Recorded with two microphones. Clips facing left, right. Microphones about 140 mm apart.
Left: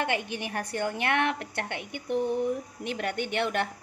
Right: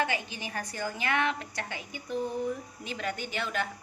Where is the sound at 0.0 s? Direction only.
60° left (ahead or behind).